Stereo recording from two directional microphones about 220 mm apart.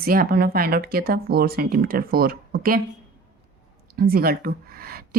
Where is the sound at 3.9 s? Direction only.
45° right (ahead or behind).